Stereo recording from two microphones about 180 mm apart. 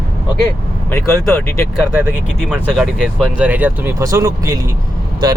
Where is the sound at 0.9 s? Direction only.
15° left (ahead or behind).